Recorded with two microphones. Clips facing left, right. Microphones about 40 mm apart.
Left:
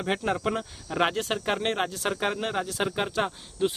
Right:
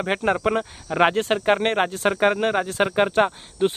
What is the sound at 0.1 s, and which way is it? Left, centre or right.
Speech, right.